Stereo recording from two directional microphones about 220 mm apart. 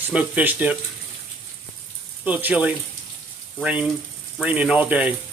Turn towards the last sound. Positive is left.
turn(degrees=-5)  # may be behind; listen again after turning